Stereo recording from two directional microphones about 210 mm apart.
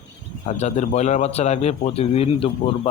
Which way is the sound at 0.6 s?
30° left (ahead or behind).